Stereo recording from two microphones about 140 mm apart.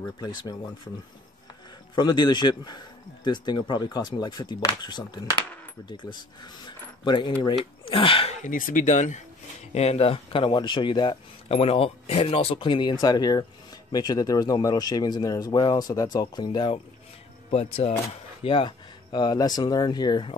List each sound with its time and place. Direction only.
0.0 s speech: 30° left (ahead or behind)
2.0 s speech: 30° left (ahead or behind)
8.5 s speech: 75° left (ahead or behind); by 11.1 s 35° left (ahead or behind)
11.4 s speech: 45° left (ahead or behind); by 20.3 s 30° left (ahead or behind)